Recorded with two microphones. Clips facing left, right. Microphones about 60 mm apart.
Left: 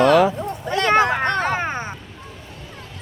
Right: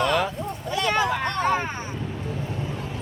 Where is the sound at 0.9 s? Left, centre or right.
Left.